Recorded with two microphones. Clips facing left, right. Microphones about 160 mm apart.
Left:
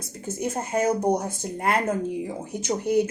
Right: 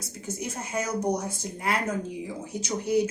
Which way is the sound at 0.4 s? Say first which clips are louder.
Left 8 dB; 50° left (ahead or behind).